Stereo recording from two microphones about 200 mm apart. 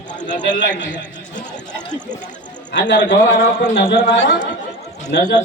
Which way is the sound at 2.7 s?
60° left (ahead or behind).